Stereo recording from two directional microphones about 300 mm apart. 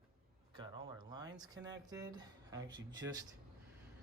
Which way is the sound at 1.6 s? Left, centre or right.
Right.